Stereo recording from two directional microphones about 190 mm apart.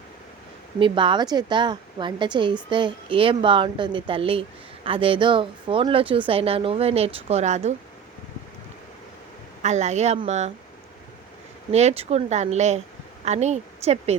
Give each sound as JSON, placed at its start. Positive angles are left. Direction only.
{"t": 0.8, "sound": "speech", "side_deg": -25}
{"t": 9.6, "sound": "speech", "side_deg": -35}
{"t": 11.7, "sound": "speech", "side_deg": -35}